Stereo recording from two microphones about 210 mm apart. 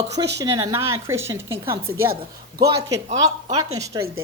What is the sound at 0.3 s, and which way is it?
A woman's voice, 15° right (ahead or behind).